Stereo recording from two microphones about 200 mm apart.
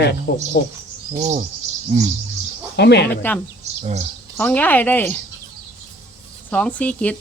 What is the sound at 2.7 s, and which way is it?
Speech, 55° left (ahead or behind).